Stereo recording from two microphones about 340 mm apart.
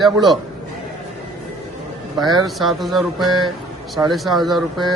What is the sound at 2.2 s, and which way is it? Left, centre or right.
Speech, centre.